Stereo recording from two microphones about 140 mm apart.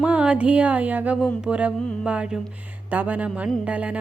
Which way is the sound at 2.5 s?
10° right (ahead or behind).